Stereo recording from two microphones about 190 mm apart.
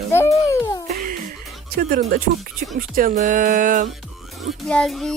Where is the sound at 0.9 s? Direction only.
45° right (ahead or behind).